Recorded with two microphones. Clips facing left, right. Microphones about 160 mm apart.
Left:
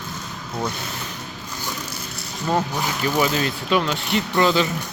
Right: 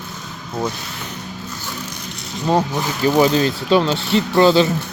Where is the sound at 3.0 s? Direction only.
35° right (ahead or behind).